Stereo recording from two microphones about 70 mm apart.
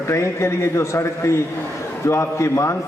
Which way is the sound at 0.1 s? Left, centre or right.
Left.